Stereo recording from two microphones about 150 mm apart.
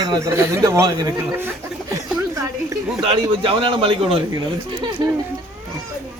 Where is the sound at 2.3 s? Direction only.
20° right (ahead or behind).